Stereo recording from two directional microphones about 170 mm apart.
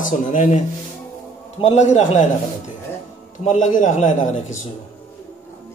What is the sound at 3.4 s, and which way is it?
A man's voice, 45° left (ahead or behind).